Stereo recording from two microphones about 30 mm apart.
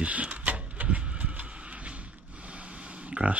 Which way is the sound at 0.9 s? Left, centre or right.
Right.